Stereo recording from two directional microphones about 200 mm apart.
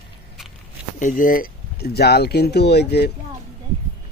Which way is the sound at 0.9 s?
40° left (ahead or behind).